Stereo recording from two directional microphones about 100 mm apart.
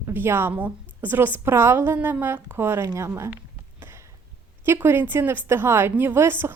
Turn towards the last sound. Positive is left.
turn(degrees=-25)  # may be behind; listen again after turning